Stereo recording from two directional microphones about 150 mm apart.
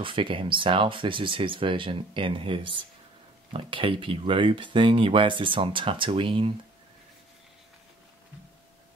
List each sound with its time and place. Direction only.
0.0 s speech: 35° right (ahead or behind)